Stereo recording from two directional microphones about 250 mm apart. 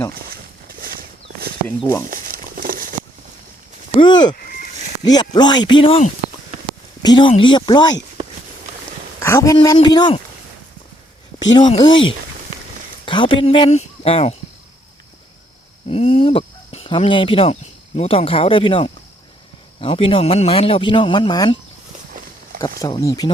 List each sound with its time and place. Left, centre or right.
0.1 s a sound: right
1.6 s speech: centre
2.0 s patter: right
3.9 s speech: centre
4.4 s a sound: left
5.1 s speech: centre
9.2 s speech: centre
11.5 s speech: centre
13.1 s speech: centre
15.9 s speech: left
22.6 s speech: centre